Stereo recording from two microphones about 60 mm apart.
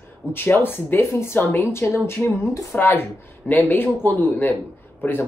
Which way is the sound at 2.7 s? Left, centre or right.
Left.